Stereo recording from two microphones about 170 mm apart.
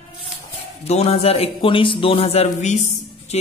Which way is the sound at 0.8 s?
35° left (ahead or behind).